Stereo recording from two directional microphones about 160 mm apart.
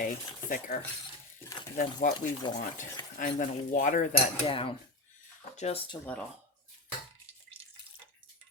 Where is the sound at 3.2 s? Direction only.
55° left (ahead or behind).